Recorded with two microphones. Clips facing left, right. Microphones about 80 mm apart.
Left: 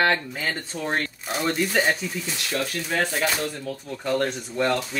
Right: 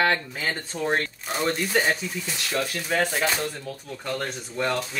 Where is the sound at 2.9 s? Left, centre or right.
Centre.